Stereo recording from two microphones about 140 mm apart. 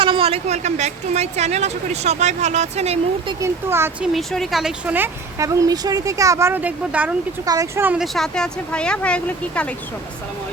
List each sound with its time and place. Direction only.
0.0 s a woman's voice: 40° right (ahead or behind)
3.4 s speech: 15° right (ahead or behind)
4.0 s speech: centre (ahead or behind)
4.9 s speech: 20° right (ahead or behind)
7.4 s speech: 25° right (ahead or behind)
7.9 s speech: centre (ahead or behind)